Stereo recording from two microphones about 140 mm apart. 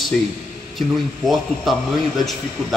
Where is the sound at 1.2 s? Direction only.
Centre (ahead or behind).